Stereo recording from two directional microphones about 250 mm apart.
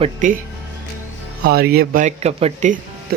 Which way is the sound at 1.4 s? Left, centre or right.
Right.